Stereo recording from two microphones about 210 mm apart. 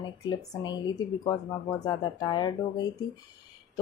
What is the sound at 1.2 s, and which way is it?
Speech, 15° left (ahead or behind).